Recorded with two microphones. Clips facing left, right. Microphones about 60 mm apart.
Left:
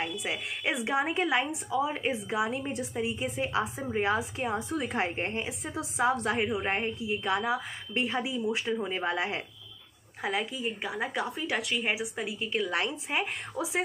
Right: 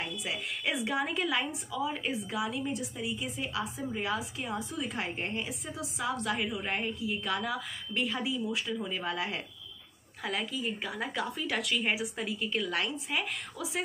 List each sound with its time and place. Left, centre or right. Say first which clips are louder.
0.8 s a woman's voice: left 5 dB; left
12.5 s a woman's voice: left 4 dB; left